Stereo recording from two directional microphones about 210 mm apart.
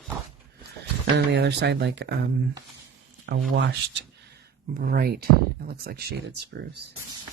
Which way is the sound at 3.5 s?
55° right (ahead or behind).